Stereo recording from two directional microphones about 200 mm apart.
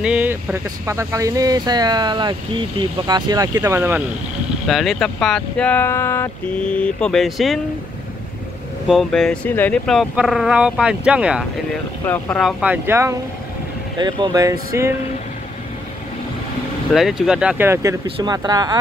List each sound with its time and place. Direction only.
0.0 s speech: 5° right (ahead or behind)
4.6 s speech: centre (ahead or behind)
8.8 s speech: centre (ahead or behind)
12.0 s speech: 10° left (ahead or behind); by 14.9 s 15° right (ahead or behind)
16.9 s speech: centre (ahead or behind); by 18.8 s 20° right (ahead or behind)